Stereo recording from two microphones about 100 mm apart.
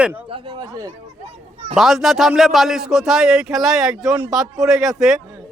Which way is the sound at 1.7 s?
Centre (ahead or behind).